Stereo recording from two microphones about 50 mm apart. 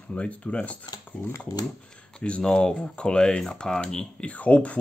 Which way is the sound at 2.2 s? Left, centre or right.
Centre.